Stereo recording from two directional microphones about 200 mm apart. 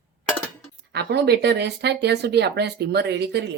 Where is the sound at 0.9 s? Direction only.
55° right (ahead or behind).